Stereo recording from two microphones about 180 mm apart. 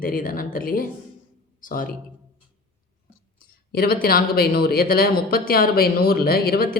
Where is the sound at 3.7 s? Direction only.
60° left (ahead or behind).